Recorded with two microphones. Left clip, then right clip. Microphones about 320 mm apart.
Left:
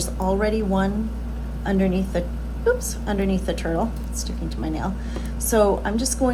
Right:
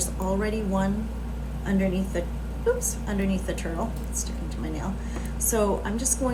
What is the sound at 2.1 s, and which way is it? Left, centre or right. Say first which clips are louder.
A woman's voice: left 4 dB; left.